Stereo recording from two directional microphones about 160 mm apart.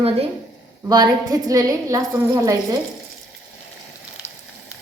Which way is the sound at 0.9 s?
25° right (ahead or behind).